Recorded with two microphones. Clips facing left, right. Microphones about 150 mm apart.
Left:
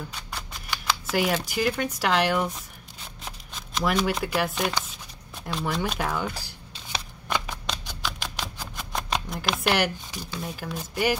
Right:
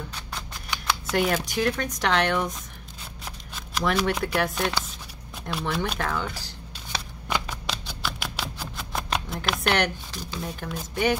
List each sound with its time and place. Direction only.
0.1 s scissors: 5° left (ahead or behind)
2.0 s speech: 5° left (ahead or behind)
3.9 s speech: 5° left (ahead or behind)
5.9 s shuffling cards: 10° left (ahead or behind)
8.0 s typewriter: 5° right (ahead or behind)
8.9 s speech: centre (ahead or behind)